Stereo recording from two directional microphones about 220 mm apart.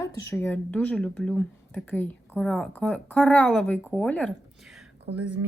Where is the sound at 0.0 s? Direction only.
10° left (ahead or behind).